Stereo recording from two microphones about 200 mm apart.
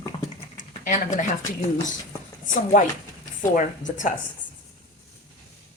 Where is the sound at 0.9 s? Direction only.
40° left (ahead or behind).